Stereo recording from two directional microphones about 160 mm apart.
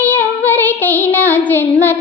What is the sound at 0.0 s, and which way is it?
Child singing, 10° left (ahead or behind).